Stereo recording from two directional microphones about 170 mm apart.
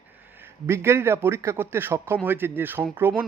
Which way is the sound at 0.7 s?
15° right (ahead or behind).